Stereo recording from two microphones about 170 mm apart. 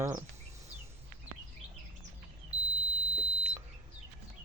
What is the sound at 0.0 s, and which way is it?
Speech, 20° right (ahead or behind).